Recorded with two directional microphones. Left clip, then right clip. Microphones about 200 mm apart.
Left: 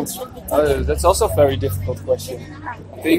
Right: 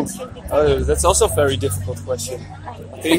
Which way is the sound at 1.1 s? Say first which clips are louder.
Left 1 dB; 30° right (ahead or behind).